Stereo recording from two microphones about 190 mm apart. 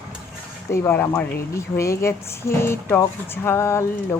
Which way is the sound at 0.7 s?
10° left (ahead or behind).